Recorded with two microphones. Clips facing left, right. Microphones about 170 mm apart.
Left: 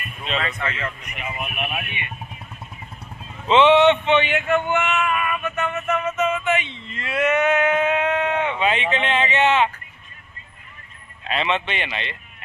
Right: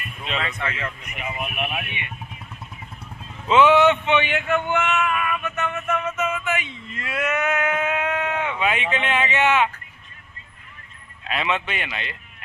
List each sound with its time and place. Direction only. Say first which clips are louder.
0.3 s speech: left 2 dB; 10° right (ahead or behind)
1.4 s speech: right 1 dB; centre (ahead or behind)
1.7 s speech: left 1 dB; 20° right (ahead or behind)
3.5 s speech: left 1 dB; 5° right (ahead or behind)
4.3 s a sound: left 2 dB; 15° left (ahead or behind)
4.6 s music: left 1 dB; 10° left (ahead or behind)
6.1 s a sound: left 4 dB; 5° right (ahead or behind)
11.3 s speech: left 2 dB; 5° right (ahead or behind)